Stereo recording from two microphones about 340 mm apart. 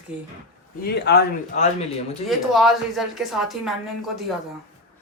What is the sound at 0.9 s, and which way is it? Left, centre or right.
Speech, left.